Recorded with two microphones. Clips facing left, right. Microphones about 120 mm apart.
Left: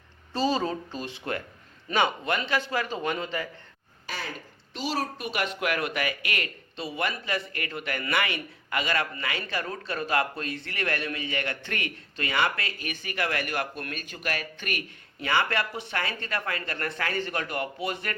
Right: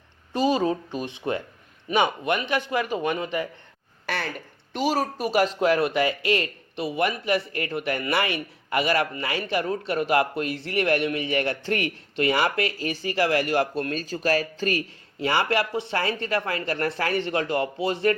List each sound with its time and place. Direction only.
0.3 s a man's voice: 15° right (ahead or behind)
4.0 s a sound: 65° right (ahead or behind)
4.7 s speech: 50° right (ahead or behind); by 18.1 s 25° right (ahead or behind)